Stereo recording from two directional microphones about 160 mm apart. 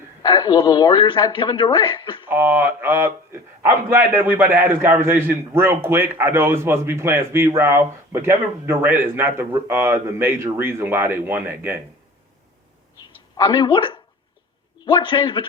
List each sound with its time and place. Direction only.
0.2 s a man's voice: 25° left (ahead or behind)
2.2 s a man's voice: 15° right (ahead or behind)
13.3 s a woman's voice: 30° left (ahead or behind)